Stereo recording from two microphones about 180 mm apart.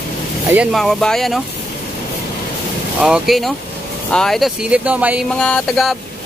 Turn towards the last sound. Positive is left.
turn(degrees=0)  # may be behind; listen again after turning